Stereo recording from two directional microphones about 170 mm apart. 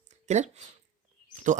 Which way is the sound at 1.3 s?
45° right (ahead or behind).